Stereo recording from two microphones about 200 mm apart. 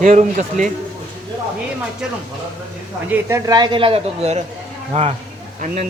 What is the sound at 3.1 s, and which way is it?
A man's voice, 15° right (ahead or behind).